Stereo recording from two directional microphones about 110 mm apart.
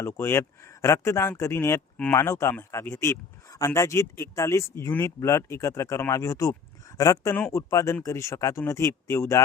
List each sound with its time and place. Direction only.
0.0 s speech: 25° left (ahead or behind)
7.3 s speech: 15° left (ahead or behind)
7.7 s speech: 30° left (ahead or behind)